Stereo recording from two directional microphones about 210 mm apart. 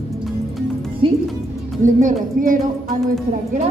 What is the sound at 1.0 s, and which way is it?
Speech, 25° right (ahead or behind).